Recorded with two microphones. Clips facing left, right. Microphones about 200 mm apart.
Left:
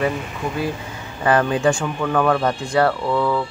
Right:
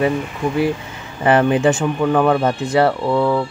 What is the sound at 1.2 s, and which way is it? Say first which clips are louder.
Speech: right 3 dB; 20° right (ahead or behind).